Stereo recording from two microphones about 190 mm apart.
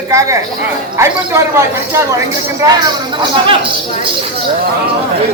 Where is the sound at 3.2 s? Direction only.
25° right (ahead or behind).